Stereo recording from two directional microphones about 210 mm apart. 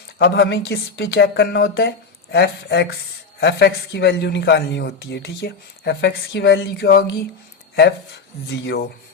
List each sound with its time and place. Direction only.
0.2 s speech: 55° left (ahead or behind)
8.4 s speech: 55° left (ahead or behind)